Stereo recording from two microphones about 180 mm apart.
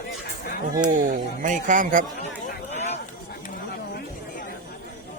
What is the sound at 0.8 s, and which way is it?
Speech, 45° right (ahead or behind).